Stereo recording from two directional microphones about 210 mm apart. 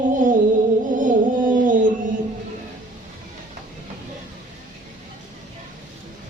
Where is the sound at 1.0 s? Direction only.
40° right (ahead or behind).